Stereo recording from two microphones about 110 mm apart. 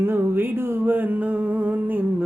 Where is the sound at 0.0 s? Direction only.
20° right (ahead or behind).